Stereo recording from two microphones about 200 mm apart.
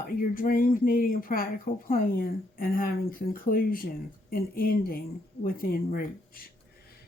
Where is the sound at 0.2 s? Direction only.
45° left (ahead or behind).